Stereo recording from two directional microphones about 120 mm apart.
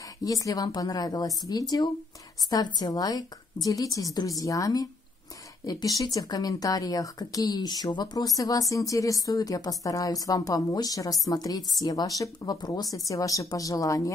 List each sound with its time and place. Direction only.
0.2 s speech: 30° left (ahead or behind)